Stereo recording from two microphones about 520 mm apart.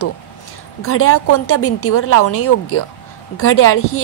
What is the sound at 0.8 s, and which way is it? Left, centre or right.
A woman's voice, left.